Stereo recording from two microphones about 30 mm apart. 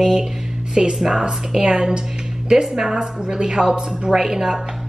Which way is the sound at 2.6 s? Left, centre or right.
Centre.